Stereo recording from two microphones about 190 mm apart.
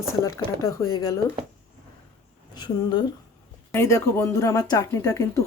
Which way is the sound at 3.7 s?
15° left (ahead or behind).